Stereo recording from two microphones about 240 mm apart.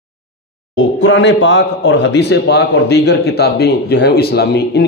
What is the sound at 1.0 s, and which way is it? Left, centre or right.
A man's voice, left.